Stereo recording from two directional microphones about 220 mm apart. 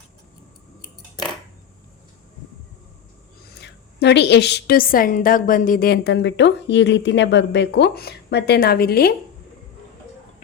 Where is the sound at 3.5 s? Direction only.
50° left (ahead or behind).